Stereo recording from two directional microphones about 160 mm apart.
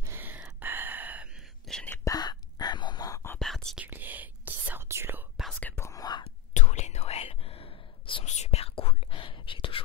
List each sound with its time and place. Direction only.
0.0 s a sound: 15° right (ahead or behind)
1.7 s whispering: 5° left (ahead or behind)
2.0 s whispering: 25° left (ahead or behind)
3.3 s whispering: centre (ahead or behind)
3.8 s whispering: 10° right (ahead or behind)
5.4 s whispering: 5° left (ahead or behind); by 6.2 s 25° left (ahead or behind)
6.2 s whispering: 45° left (ahead or behind)